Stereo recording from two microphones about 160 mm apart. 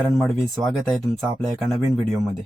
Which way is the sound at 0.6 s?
20° right (ahead or behind).